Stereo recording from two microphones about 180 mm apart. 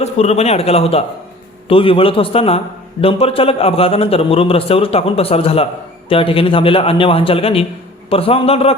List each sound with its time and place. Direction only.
0.0 s a man's voice: 35° left (ahead or behind)